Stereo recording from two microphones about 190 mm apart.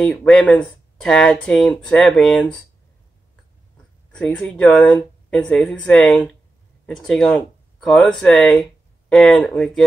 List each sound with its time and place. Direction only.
0.0 s speech: 5° left (ahead or behind)
4.1 s speech: 5° left (ahead or behind)